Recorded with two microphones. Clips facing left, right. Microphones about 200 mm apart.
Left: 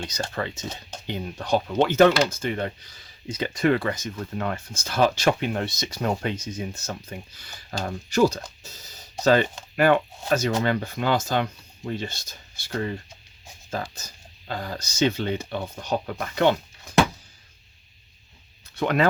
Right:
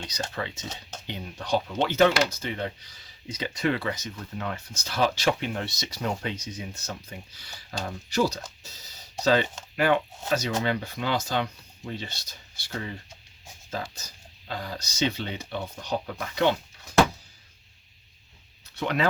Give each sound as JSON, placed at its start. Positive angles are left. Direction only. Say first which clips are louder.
{"t": 0.0, "sound": "speech", "louder": "left 3 dB", "side_deg": 50}
{"t": 18.8, "sound": "speech", "louder": "left 5 dB", "side_deg": 50}